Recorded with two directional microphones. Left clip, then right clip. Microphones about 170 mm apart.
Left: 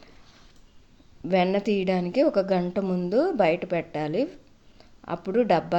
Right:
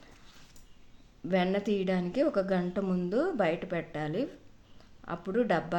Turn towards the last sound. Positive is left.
turn(degrees=25)  # may be behind; listen again after turning